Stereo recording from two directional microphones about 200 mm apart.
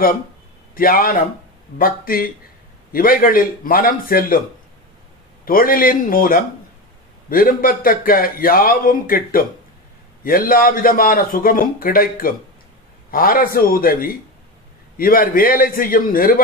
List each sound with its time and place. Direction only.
0.7 s speech: 45° left (ahead or behind)
5.4 s speech: 45° left (ahead or behind)